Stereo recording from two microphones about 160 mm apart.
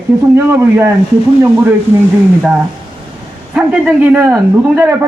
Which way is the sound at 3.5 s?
5° right (ahead or behind).